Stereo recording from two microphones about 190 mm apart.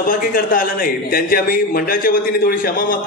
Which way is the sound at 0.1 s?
45° left (ahead or behind).